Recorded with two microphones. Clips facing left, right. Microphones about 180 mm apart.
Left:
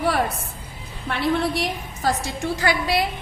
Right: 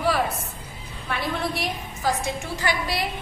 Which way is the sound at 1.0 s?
65° left (ahead or behind).